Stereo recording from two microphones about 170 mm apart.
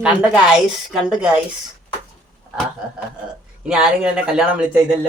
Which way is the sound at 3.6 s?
5° right (ahead or behind).